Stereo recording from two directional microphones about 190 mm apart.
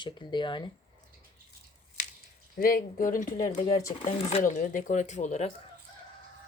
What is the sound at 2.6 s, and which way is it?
Speech, 50° left (ahead or behind).